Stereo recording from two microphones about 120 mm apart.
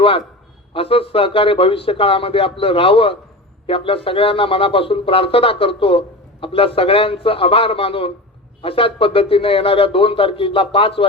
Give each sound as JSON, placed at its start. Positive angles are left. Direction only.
{"t": 0.7, "sound": "speech", "side_deg": 50}